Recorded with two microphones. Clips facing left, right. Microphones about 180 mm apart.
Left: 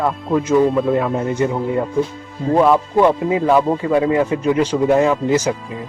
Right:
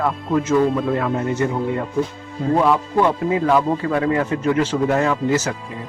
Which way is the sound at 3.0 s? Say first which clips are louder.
Left 3 dB; 15° left (ahead or behind).